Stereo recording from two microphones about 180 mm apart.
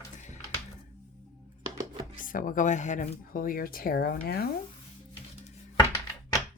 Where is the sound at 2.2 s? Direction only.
50° left (ahead or behind).